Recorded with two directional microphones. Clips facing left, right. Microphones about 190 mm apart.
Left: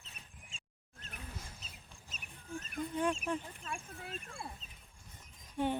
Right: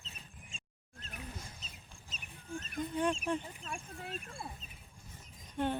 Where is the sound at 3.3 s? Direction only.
5° left (ahead or behind).